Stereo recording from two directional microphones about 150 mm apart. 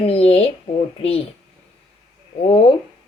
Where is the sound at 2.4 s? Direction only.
40° left (ahead or behind).